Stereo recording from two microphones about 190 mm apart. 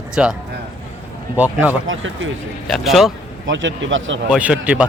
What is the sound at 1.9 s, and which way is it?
Speech, 90° right.